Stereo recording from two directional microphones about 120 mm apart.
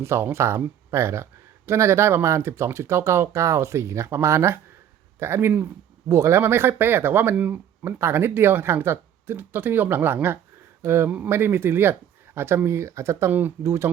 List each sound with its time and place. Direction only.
0.0 s speech: 20° right (ahead or behind)